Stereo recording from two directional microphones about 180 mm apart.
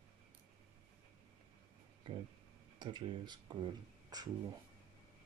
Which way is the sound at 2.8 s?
25° right (ahead or behind).